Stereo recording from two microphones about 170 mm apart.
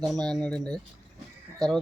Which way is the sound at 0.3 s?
5° left (ahead or behind).